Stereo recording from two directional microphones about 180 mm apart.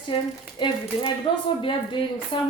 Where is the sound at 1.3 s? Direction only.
30° left (ahead or behind).